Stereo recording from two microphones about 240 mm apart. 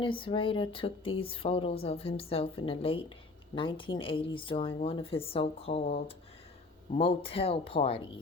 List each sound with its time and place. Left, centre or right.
0.0 s speech: left